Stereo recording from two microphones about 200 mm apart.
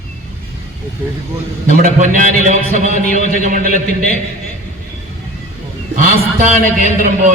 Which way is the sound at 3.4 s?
40° right (ahead or behind).